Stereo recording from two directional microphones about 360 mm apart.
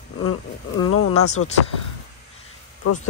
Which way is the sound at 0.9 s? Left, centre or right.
Left.